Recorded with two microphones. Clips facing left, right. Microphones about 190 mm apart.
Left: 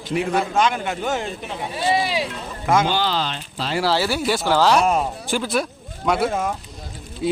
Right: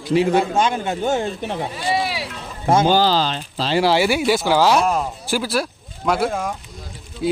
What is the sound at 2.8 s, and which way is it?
Speech, 40° right (ahead or behind).